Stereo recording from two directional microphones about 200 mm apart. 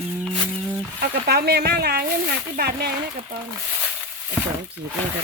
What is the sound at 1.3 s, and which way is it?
A woman's voice, 55° right (ahead or behind).